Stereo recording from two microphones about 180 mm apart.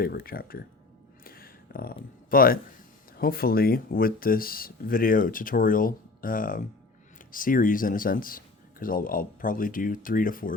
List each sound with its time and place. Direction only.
0.0 s speech: 55° left (ahead or behind)
1.2 s a sound: 55° left (ahead or behind)
3.2 s speech: 55° left (ahead or behind)